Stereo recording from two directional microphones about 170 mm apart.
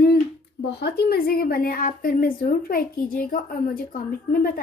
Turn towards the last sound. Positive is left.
turn(degrees=60)  # may be behind; listen again after turning